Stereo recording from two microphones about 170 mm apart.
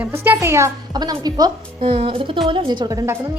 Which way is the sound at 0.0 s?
15° right (ahead or behind).